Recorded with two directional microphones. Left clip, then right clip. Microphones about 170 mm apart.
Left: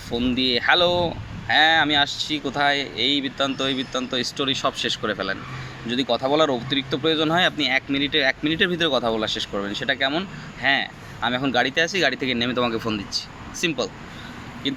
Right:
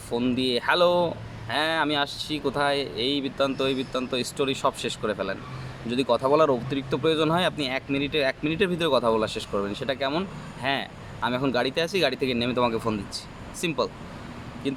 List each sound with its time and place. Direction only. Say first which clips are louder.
0.1 s speech: left 3 dB; 15° right (ahead or behind)
9.0 s speech: even; 15° left (ahead or behind)
9.7 s speech: left 9 dB; 15° right (ahead or behind)